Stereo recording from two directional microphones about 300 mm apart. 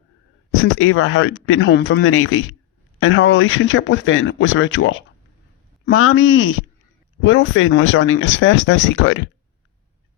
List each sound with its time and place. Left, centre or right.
0.5 s speech: left